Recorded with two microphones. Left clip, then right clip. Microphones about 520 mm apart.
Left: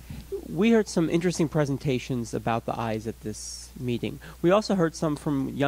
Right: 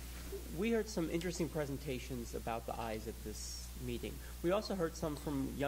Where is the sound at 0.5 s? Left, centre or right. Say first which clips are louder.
Left 14 dB; left.